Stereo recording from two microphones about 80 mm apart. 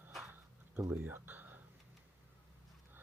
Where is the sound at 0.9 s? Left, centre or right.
Right.